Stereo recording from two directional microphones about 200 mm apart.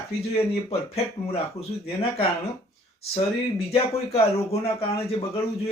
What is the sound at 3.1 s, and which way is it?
Speech, 30° left (ahead or behind).